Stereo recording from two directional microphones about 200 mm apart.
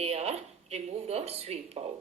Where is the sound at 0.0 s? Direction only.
30° right (ahead or behind).